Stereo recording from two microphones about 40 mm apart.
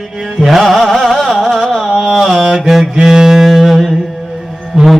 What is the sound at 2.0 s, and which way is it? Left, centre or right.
Mantra, centre.